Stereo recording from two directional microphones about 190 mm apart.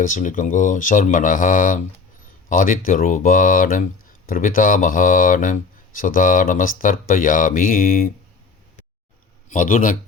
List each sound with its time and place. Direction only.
0.0 s speech: 45° left (ahead or behind)
9.5 s speech: 45° left (ahead or behind)